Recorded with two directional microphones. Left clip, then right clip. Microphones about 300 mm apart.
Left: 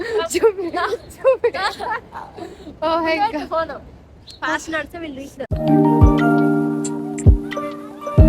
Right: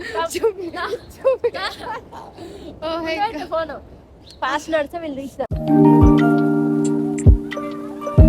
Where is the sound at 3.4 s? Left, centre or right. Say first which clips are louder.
Left 1 dB; centre.